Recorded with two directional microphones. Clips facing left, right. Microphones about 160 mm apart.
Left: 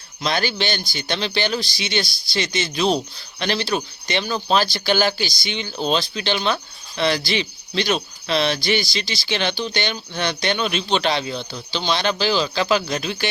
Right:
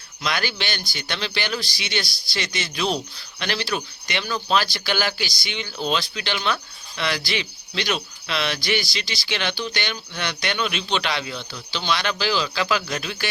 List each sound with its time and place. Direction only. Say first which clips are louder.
0.2 s speech: left 4 dB; 30° left (ahead or behind)